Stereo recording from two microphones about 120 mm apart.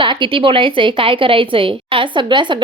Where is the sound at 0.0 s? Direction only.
45° right (ahead or behind).